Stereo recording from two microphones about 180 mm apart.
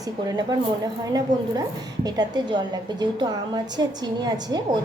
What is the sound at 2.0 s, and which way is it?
A woman's voice, 25° right (ahead or behind).